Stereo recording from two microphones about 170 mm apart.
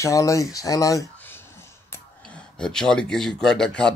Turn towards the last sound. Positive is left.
turn(degrees=5)  # may be behind; listen again after turning